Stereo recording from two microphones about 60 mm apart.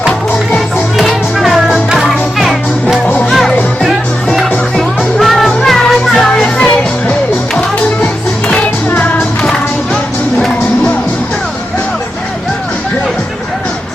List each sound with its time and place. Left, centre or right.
0.9 s music: centre
8.9 s music: left
9.4 s music: centre